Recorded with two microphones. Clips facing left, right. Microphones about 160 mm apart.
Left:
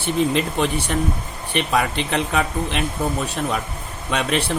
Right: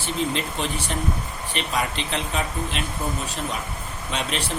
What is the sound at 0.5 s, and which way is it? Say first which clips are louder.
Speech: left 6 dB; 60° left (ahead or behind).